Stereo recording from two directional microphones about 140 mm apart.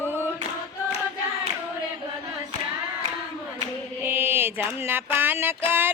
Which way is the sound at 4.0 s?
15° right (ahead or behind).